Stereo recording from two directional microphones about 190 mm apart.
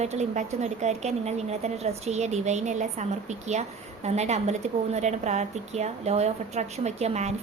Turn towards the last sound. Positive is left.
turn(degrees=-35)  # may be behind; listen again after turning